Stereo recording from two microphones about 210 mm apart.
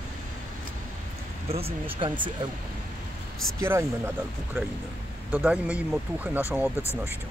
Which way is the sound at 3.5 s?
10° right (ahead or behind).